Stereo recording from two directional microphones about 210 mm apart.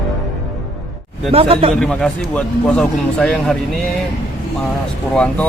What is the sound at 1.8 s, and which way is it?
A man's voice, 5° left (ahead or behind).